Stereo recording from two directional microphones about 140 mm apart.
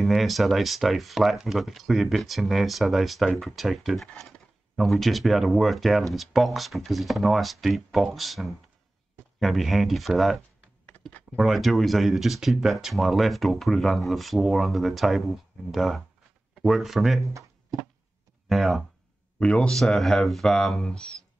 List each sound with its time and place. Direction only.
0.0 s speech: centre (ahead or behind)
10.9 s typing: 10° left (ahead or behind)
11.3 s speech: centre (ahead or behind)
17.3 s a sound: 20° right (ahead or behind)
18.5 s speech: centre (ahead or behind)